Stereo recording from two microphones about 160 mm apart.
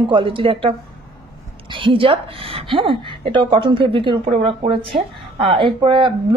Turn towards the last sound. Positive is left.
turn(degrees=-30)  # may be behind; listen again after turning